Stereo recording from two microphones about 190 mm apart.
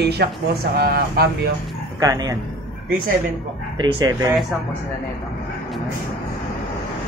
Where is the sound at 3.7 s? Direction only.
25° right (ahead or behind).